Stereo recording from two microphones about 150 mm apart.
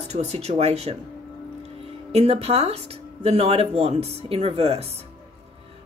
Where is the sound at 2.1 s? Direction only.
45° right (ahead or behind).